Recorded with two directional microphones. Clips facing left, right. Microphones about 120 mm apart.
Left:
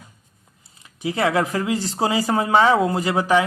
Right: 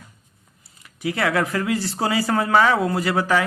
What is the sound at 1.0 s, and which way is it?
A man's voice, 20° left (ahead or behind).